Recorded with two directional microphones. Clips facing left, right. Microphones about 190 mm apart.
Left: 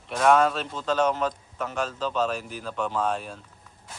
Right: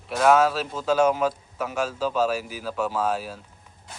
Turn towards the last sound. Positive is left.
turn(degrees=-5)  # may be behind; listen again after turning